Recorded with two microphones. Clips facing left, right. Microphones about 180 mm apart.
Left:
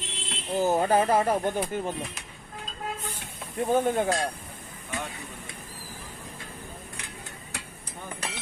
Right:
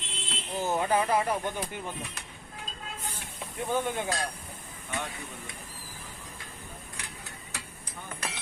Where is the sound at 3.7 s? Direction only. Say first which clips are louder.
Left 6 dB; 40° left (ahead or behind).